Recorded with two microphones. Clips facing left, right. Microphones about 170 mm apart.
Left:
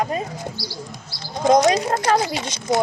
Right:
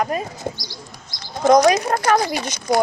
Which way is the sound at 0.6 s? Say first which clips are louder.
Left 5 dB; 5° left (ahead or behind).